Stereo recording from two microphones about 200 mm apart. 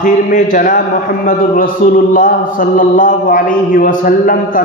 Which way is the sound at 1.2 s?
40° left (ahead or behind).